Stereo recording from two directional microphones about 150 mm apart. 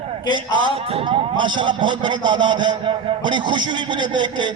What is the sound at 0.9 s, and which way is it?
A man's voice, 35° right (ahead or behind).